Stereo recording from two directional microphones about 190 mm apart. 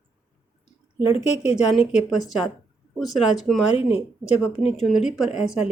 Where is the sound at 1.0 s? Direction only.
30° left (ahead or behind).